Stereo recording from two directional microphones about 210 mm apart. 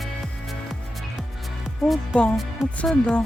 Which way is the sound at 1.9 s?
5° left (ahead or behind).